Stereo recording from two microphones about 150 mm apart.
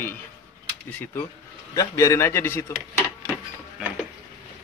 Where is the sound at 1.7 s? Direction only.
20° left (ahead or behind).